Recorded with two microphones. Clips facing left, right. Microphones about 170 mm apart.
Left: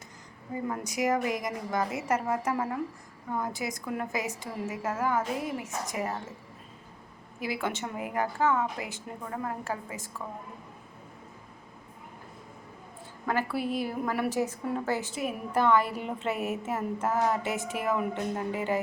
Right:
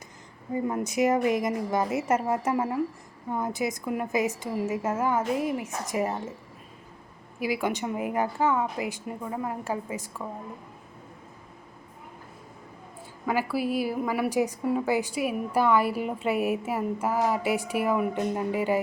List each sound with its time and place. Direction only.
0.5 s a woman's voice: 25° right (ahead or behind)
7.3 s a woman's voice: 10° right (ahead or behind)
13.2 s a woman's voice: 5° right (ahead or behind)